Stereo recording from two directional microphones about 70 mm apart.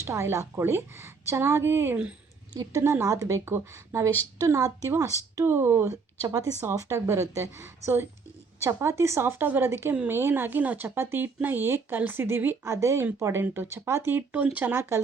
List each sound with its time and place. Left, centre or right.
0.0 s a woman's voice: right
5.5 s speech: right
6.2 s a woman's voice: right
10.8 s a woman's voice: right
13.4 s speech: right
14.3 s speech: right